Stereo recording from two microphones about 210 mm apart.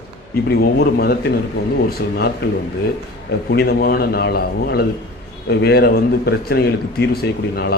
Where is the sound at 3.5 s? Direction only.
50° left (ahead or behind).